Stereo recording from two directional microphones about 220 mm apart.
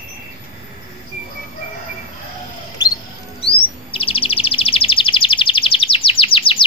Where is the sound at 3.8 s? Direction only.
25° left (ahead or behind).